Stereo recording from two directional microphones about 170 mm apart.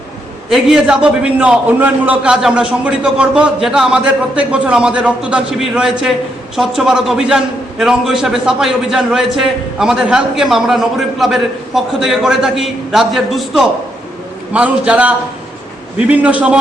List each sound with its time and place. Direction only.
0.5 s a man's voice: 5° right (ahead or behind)